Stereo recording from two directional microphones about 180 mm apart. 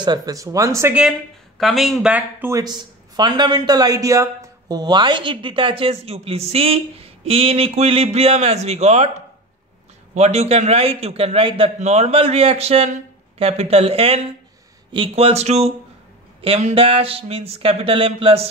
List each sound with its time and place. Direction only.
0.0 s speech: 20° right (ahead or behind)
1.6 s speech: centre (ahead or behind); by 9.1 s 40° right (ahead or behind)
10.1 s a man's voice: 35° right (ahead or behind)